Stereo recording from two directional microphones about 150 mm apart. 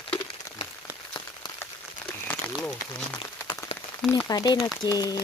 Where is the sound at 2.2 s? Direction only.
10° left (ahead or behind).